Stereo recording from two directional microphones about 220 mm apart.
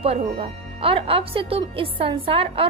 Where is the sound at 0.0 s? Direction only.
25° right (ahead or behind).